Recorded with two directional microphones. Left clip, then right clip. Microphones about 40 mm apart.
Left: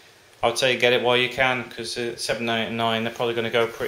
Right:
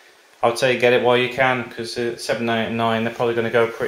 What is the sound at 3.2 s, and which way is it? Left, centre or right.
Speech, left.